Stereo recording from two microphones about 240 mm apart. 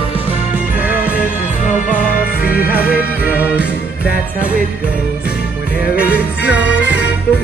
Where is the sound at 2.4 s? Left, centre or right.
Left.